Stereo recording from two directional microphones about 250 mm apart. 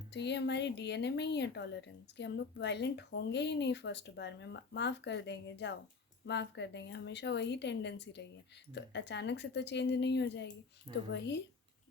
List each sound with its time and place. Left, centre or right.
0.1 s speech: left